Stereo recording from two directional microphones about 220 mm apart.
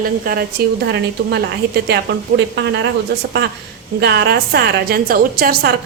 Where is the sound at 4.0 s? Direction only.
50° right (ahead or behind).